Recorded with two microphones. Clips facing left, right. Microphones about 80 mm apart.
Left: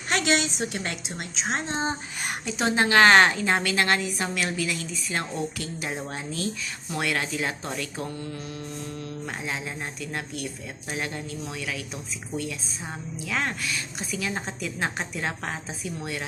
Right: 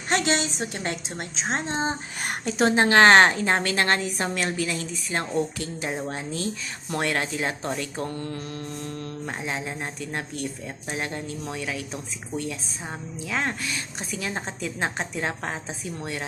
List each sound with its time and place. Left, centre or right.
0.1 s a woman's voice: right
2.2 s a woman's voice: right
2.7 s a woman's voice: right
9.2 s a woman's voice: right
13.2 s a woman's voice: right
13.7 s a woman's voice: right